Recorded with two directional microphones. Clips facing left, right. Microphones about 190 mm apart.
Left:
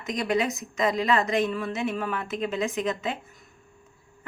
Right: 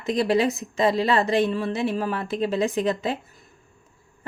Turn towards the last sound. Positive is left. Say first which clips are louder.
# right 4 dB
turn(degrees=-35)  # may be behind; listen again after turning